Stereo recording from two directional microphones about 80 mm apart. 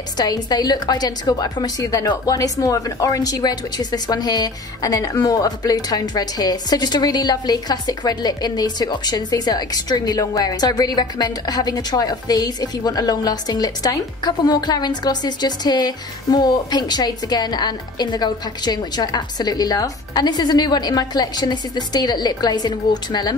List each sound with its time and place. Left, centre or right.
0.2 s a woman's voice: left